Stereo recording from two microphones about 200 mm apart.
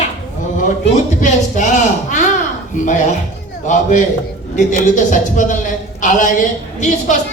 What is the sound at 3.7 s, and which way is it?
A woman's voice, 40° left (ahead or behind).